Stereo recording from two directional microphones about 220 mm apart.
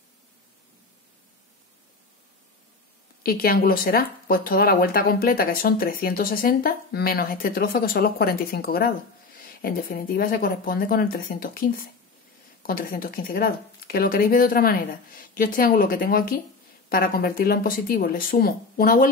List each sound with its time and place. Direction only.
3.3 s speech: 45° left (ahead or behind)